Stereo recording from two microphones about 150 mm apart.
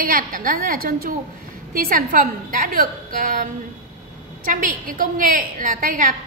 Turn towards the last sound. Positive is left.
turn(degrees=-65)  # may be behind; listen again after turning